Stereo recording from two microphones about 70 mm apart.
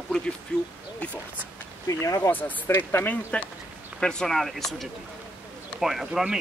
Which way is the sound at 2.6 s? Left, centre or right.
Left.